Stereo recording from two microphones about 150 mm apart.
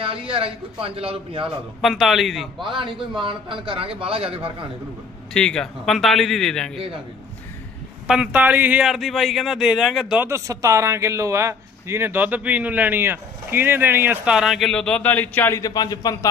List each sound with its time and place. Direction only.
0.0 s a man's voice: 35° right (ahead or behind)
1.8 s speech: centre (ahead or behind)
2.6 s a man's voice: 35° right (ahead or behind)
5.3 s speech: 5° left (ahead or behind)
8.0 s speech: 5° right (ahead or behind)
10.2 s a man's voice: 20° right (ahead or behind); by 16.1 s 25° left (ahead or behind)